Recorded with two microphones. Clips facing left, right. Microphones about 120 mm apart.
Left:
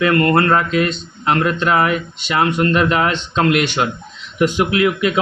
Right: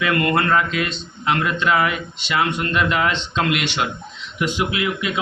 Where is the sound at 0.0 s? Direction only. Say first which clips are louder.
Left 5 dB; 45° left (ahead or behind).